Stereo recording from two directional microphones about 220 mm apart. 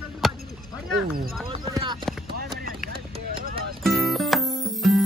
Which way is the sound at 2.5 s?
45° right (ahead or behind).